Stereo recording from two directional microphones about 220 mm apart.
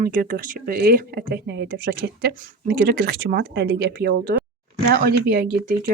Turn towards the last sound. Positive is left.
turn(degrees=-40)  # may be behind; listen again after turning